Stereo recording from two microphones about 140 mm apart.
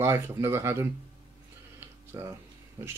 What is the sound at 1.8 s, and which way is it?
Tick-tock, 15° right (ahead or behind).